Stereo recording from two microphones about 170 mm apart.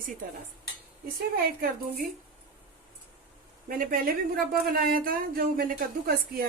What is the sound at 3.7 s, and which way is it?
A woman's voice, 60° right (ahead or behind).